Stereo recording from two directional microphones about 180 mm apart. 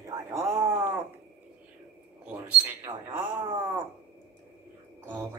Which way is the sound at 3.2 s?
25° right (ahead or behind).